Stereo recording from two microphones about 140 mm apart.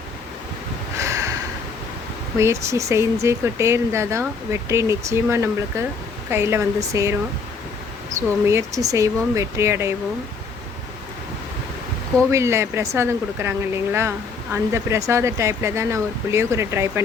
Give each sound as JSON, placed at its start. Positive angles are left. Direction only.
{"t": 1.0, "sound": "a sound", "side_deg": -20}
{"t": 2.4, "sound": "speech", "side_deg": -20}
{"t": 8.4, "sound": "speech", "side_deg": -20}
{"t": 12.3, "sound": "speech", "side_deg": -20}